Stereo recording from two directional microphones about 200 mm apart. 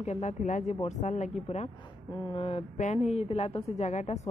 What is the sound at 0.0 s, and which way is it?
A woman's voice, 35° left (ahead or behind).